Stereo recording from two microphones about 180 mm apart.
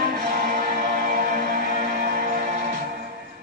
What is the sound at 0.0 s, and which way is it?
Music, 60° right (ahead or behind).